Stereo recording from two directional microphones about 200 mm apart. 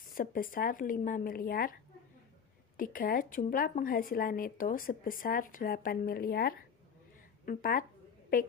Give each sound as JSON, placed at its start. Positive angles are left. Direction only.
{"t": 0.0, "sound": "a woman's voice", "side_deg": 45}
{"t": 2.8, "sound": "a woman's voice", "side_deg": 45}